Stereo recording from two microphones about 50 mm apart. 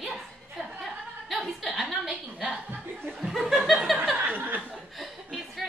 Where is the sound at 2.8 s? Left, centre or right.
Right.